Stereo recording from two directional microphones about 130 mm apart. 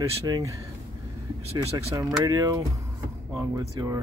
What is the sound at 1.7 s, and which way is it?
Speech, 25° right (ahead or behind).